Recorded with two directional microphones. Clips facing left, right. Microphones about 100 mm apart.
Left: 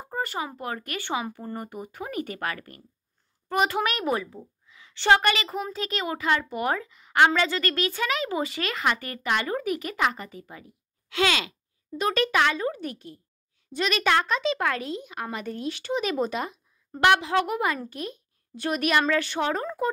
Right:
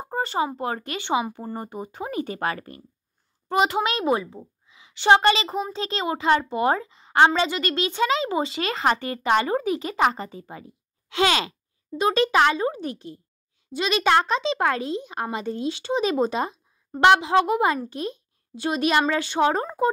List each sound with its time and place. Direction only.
0.0 s a woman's voice: 25° right (ahead or behind)